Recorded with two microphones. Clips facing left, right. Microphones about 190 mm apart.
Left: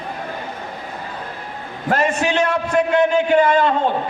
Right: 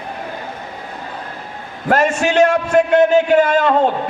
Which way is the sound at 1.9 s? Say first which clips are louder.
Right 3 dB; 45° right (ahead or behind).